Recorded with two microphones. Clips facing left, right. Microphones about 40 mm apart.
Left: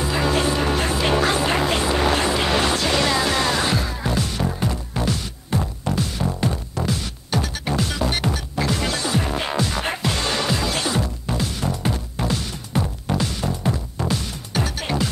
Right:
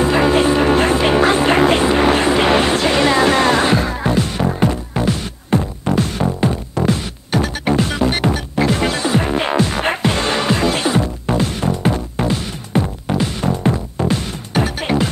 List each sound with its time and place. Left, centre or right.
0.0 s music: right
0.3 s music: right